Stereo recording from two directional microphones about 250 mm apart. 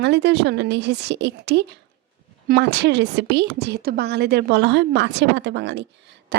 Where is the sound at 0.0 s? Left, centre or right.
Right.